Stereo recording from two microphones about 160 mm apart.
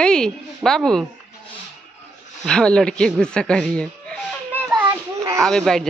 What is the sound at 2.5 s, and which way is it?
Speech, 5° left (ahead or behind).